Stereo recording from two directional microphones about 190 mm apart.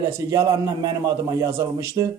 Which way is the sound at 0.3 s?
20° right (ahead or behind).